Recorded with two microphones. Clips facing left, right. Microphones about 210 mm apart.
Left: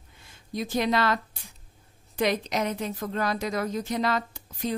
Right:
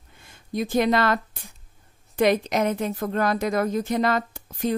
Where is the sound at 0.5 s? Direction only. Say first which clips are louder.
Right 5 dB; 55° right (ahead or behind).